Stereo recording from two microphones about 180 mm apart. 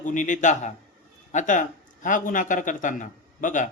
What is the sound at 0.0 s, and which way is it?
Speech, 45° left (ahead or behind).